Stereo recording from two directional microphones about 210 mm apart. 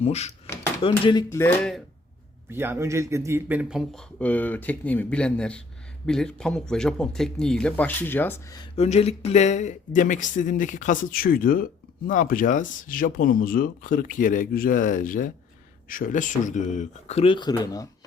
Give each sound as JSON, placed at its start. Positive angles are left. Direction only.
{"t": 0.0, "sound": "speech", "side_deg": 30}
{"t": 1.3, "sound": "speech", "side_deg": 10}
{"t": 2.5, "sound": "speech", "side_deg": -10}
{"t": 8.7, "sound": "speech", "side_deg": 30}